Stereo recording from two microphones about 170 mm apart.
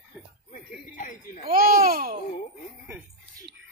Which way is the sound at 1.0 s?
45° left (ahead or behind).